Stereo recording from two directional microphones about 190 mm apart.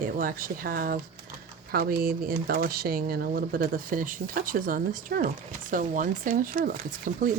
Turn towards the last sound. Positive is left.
turn(degrees=-45)  # may be behind; listen again after turning